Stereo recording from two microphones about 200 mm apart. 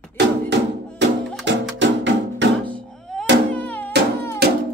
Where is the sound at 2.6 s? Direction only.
5° left (ahead or behind).